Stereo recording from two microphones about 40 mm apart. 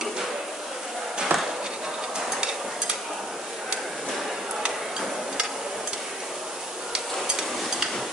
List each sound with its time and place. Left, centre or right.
1.3 s chop: right